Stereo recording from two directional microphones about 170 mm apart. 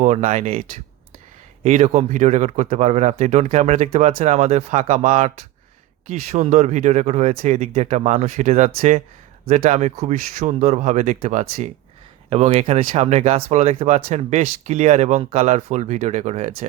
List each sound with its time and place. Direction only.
0.0 s speech: 45° right (ahead or behind)
1.6 s speech: 40° right (ahead or behind)